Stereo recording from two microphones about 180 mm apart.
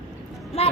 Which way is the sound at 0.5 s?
35° left (ahead or behind).